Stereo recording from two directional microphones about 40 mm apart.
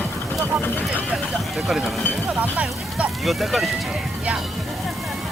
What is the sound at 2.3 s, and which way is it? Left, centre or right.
Speech, right.